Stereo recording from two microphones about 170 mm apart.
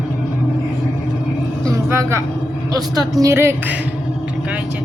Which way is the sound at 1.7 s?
15° right (ahead or behind).